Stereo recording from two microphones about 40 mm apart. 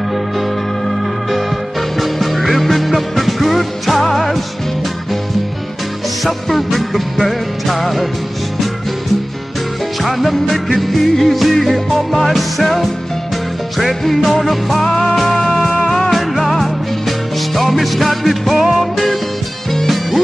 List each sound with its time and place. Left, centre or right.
2.0 s music: centre
6.2 s music: centre
10.0 s music: centre
16.0 s music: centre